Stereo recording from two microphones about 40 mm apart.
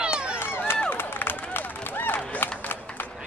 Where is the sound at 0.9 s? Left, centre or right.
Left.